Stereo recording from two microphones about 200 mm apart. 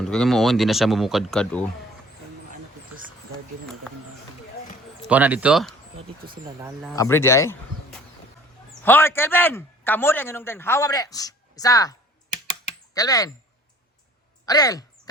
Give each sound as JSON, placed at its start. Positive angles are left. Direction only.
{"t": 0.0, "sound": "speech", "side_deg": 0}
{"t": 4.9, "sound": "speech", "side_deg": -5}
{"t": 6.9, "sound": "a man's voice", "side_deg": 15}
{"t": 8.8, "sound": "a man's voice", "side_deg": 10}
{"t": 12.3, "sound": "computer keyboard", "side_deg": 35}
{"t": 12.9, "sound": "speech", "side_deg": 20}
{"t": 14.4, "sound": "a sound", "side_deg": 20}